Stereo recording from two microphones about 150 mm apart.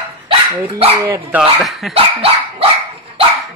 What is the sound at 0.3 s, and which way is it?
Speech, 40° right (ahead or behind).